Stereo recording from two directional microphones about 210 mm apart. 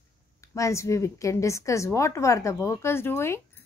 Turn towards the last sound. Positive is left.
turn(degrees=10)  # may be behind; listen again after turning